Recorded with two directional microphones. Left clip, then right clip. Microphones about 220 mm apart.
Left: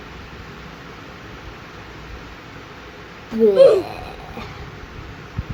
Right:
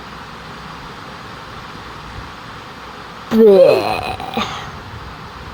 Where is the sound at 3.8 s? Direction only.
25° right (ahead or behind).